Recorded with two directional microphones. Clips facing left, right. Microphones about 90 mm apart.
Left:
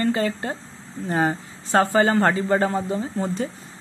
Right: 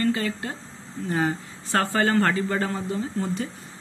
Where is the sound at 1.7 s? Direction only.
20° left (ahead or behind).